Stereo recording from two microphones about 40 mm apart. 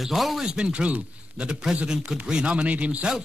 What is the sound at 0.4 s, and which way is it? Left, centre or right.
Speech, right.